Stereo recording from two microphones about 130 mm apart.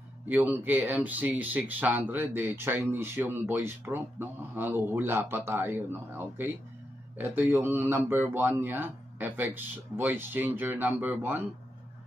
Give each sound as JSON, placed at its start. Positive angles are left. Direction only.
{"t": 0.3, "sound": "speech", "side_deg": -15}